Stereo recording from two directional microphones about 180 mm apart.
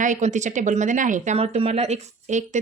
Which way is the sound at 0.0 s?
40° right (ahead or behind).